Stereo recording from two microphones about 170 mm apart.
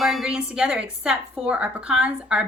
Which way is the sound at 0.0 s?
Centre (ahead or behind).